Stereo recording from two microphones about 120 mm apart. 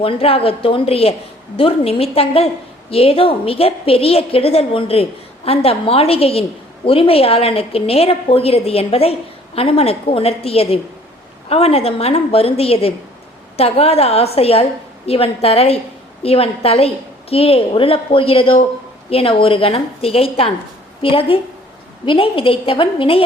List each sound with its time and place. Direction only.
0.0 s a woman's voice: 50° left (ahead or behind)